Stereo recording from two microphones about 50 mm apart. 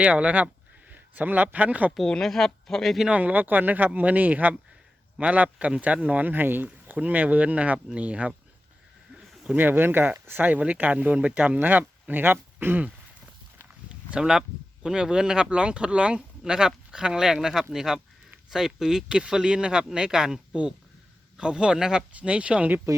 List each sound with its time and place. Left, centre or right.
0.0 s a sound: right
1.5 s speech: right
2.2 s speech: centre
3.1 s speech: right
9.6 s speech: right
14.2 s speech: centre